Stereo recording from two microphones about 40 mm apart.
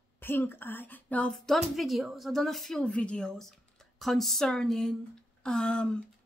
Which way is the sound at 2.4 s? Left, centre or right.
Centre.